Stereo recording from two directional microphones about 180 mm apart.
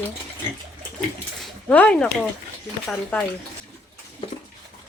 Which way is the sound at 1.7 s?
10° left (ahead or behind).